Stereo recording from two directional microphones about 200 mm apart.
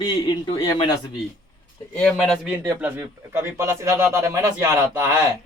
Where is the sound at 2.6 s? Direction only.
10° right (ahead or behind).